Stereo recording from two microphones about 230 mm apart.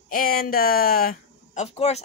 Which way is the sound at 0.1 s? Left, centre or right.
Left.